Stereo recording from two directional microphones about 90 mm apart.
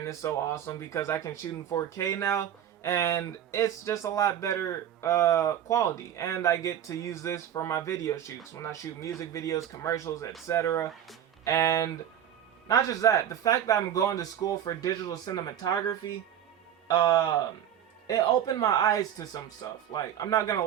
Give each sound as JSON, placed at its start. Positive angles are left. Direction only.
{"t": 0.0, "sound": "speech", "side_deg": 35}